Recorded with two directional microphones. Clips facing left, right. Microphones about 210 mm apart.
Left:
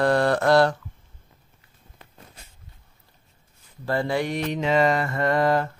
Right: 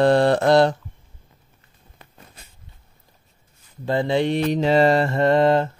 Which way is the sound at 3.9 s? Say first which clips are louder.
Right 4 dB; 20° right (ahead or behind).